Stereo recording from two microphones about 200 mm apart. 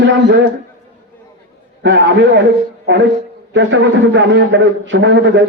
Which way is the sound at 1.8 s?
60° right (ahead or behind).